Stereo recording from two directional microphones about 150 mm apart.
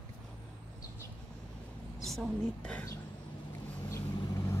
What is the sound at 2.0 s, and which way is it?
Speech, centre (ahead or behind).